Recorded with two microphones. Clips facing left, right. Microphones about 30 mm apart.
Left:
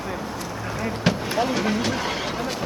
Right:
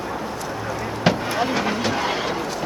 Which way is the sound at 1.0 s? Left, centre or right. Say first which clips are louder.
Right 3 dB; centre.